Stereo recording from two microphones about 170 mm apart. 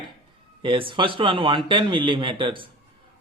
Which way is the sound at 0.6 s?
30° right (ahead or behind).